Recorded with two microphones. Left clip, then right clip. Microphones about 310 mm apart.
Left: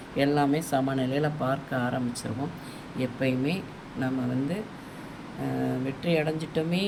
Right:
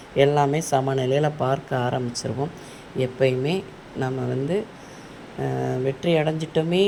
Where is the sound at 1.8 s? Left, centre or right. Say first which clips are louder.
Right 5 dB; right.